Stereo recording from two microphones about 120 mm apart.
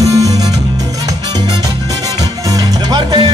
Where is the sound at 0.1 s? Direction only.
30° right (ahead or behind).